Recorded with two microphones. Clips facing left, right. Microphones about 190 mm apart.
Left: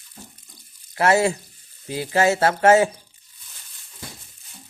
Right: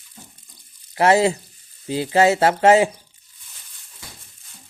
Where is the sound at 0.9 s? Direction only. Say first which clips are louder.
Right 2 dB; 20° right (ahead or behind).